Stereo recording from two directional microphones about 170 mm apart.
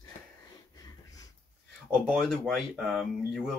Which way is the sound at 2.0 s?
Centre (ahead or behind).